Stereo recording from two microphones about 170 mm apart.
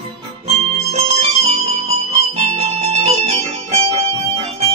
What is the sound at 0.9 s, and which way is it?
Music, 40° right (ahead or behind).